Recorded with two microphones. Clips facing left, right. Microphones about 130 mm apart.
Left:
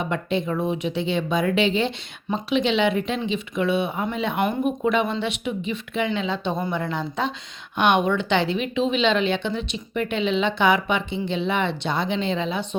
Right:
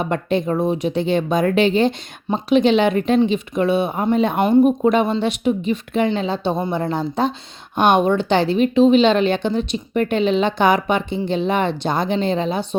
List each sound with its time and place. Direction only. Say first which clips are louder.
0.0 s a woman's voice: right 5 dB; 45° right (ahead or behind)